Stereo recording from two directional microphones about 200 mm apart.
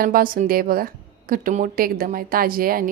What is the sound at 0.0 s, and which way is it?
A woman's voice, 45° right (ahead or behind).